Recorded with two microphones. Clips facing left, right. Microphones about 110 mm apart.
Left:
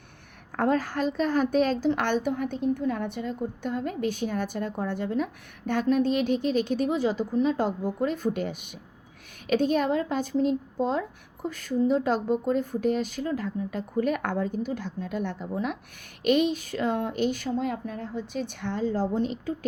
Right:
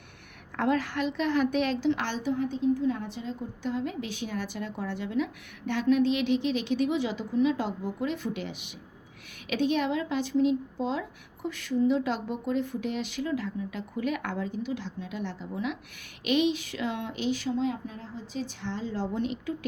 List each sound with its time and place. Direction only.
0.5 s a woman's voice: 40° left (ahead or behind)
19.1 s a woman's voice: 35° left (ahead or behind)